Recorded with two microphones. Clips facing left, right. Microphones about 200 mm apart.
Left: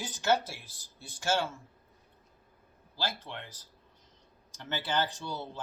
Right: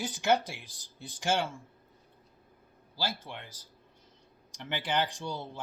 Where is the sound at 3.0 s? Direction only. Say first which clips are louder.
Even; 10° right (ahead or behind).